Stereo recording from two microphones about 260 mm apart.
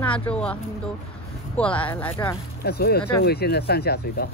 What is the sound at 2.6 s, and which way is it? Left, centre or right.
Speech, left.